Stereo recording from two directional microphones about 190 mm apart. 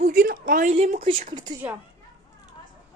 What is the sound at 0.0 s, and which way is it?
Speech, 45° right (ahead or behind).